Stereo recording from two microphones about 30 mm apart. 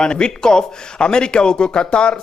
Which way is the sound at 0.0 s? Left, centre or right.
Left.